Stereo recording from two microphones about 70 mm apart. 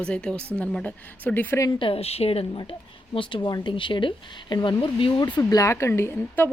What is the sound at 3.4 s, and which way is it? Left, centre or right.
Speech, left.